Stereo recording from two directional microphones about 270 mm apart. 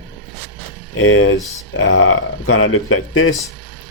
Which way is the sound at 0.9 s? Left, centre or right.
Left.